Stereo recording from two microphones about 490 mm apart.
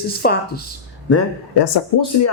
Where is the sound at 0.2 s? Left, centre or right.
Centre.